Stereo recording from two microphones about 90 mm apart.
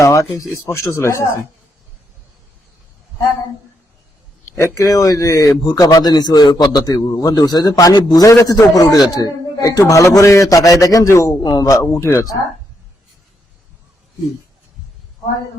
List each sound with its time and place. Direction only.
0.0 s a man's voice: 35° left (ahead or behind)
4.5 s a man's voice: 35° left (ahead or behind)